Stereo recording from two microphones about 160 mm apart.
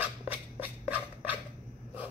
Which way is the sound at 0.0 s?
10° right (ahead or behind).